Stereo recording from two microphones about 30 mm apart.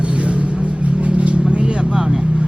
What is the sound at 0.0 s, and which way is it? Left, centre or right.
Vehicle, right.